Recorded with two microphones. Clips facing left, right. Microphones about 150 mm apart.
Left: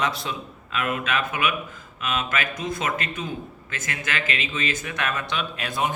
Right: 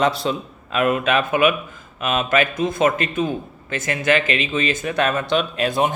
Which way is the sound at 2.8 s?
55° right (ahead or behind).